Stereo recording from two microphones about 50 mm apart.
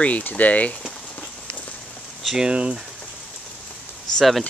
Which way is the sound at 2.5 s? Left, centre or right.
Right.